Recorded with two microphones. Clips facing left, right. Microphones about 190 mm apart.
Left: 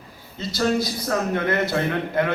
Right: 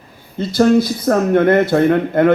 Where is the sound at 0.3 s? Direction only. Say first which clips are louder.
Right 10 dB; 55° right (ahead or behind).